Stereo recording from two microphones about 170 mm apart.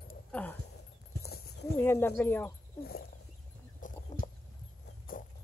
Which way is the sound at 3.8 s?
50° left (ahead or behind).